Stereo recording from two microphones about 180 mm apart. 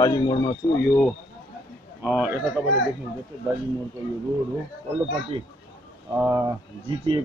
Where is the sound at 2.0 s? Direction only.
10° right (ahead or behind).